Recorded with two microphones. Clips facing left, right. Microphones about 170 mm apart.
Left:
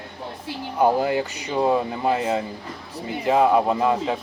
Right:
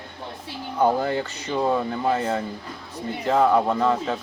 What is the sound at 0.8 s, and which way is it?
Speech, 15° left (ahead or behind).